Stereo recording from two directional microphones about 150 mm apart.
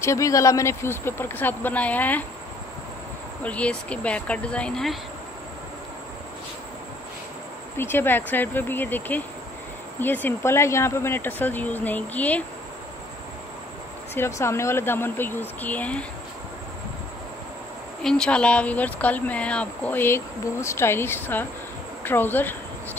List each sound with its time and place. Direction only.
0.0 s speech: 20° left (ahead or behind)
3.4 s speech: 10° left (ahead or behind)
7.7 s speech: 15° left (ahead or behind)
14.1 s speech: 15° left (ahead or behind)
18.0 s speech: 5° left (ahead or behind)